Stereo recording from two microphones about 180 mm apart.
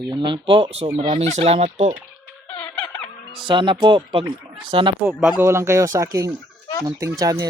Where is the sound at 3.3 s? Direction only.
25° right (ahead or behind).